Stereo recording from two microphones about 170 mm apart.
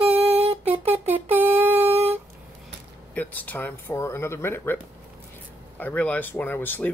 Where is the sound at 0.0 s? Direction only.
35° right (ahead or behind).